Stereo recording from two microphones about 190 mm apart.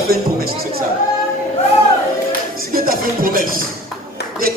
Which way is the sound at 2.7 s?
50° right (ahead or behind).